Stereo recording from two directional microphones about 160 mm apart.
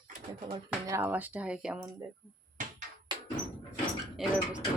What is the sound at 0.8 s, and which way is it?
Speech, 15° right (ahead or behind).